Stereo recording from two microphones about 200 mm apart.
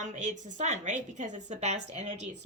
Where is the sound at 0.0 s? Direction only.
35° right (ahead or behind).